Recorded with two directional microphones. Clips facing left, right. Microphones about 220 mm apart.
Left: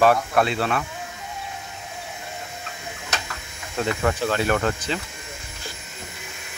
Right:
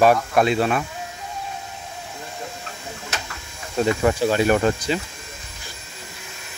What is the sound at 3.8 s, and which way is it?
Speech, 15° right (ahead or behind).